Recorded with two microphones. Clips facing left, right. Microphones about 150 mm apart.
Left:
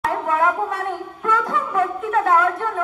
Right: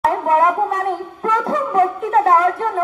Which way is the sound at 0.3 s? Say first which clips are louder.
Right 4 dB; 35° right (ahead or behind).